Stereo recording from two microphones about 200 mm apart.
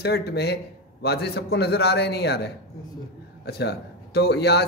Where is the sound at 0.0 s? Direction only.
55° left (ahead or behind).